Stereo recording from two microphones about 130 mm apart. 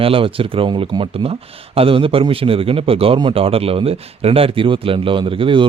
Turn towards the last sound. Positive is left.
turn(degrees=-40)  # may be behind; listen again after turning